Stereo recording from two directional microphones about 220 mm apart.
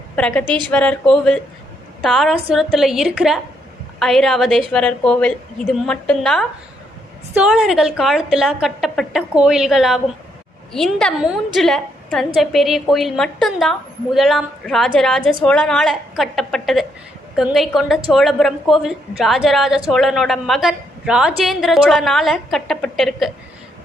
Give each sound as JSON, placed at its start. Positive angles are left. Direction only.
{"t": 0.2, "sound": "a woman's voice", "side_deg": 5}
{"t": 0.4, "sound": "a woman's voice", "side_deg": -20}
{"t": 0.7, "sound": "a woman's voice", "side_deg": 5}
{"t": 15.2, "sound": "a woman's voice", "side_deg": -20}
{"t": 15.4, "sound": "a woman's voice", "side_deg": 5}